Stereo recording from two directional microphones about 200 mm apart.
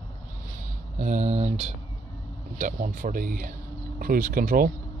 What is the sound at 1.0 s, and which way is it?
Speech, 35° right (ahead or behind).